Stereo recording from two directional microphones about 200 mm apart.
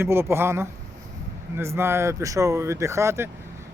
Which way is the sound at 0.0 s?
10° right (ahead or behind).